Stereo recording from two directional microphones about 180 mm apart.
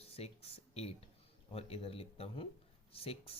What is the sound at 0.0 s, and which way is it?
Speech, 35° left (ahead or behind).